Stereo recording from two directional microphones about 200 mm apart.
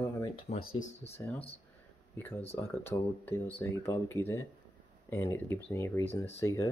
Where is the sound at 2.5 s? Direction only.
10° left (ahead or behind).